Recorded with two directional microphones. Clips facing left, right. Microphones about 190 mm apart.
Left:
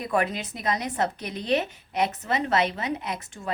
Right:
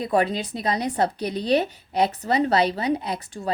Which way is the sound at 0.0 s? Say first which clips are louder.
Right 4 dB; 30° right (ahead or behind).